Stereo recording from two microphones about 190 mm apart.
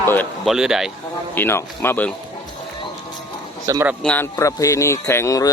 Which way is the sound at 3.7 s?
15° right (ahead or behind).